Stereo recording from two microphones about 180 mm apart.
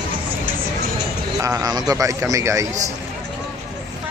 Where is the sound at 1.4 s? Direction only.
20° right (ahead or behind).